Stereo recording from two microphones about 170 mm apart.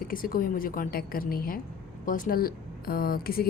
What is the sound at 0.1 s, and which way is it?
A woman's voice, 55° left (ahead or behind).